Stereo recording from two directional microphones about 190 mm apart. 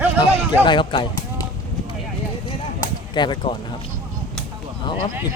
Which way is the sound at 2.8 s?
25° left (ahead or behind).